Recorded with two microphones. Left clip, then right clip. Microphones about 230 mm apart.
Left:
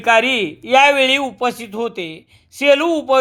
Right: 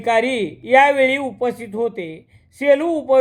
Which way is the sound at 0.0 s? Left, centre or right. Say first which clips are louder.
Left 4 dB; left.